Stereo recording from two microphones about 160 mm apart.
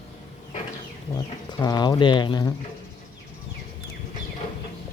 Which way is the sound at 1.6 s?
25° left (ahead or behind).